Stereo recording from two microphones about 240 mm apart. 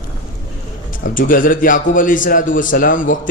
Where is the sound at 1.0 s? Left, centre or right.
Left.